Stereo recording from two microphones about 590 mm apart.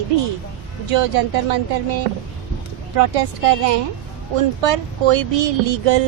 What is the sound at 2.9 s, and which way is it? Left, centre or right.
Speech, right.